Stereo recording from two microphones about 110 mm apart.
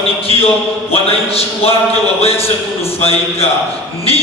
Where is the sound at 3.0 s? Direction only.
65° left (ahead or behind).